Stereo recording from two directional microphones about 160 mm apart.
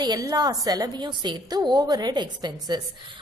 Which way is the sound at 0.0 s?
25° right (ahead or behind).